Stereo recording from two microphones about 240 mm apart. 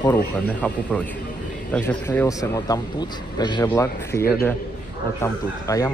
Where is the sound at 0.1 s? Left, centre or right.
Centre.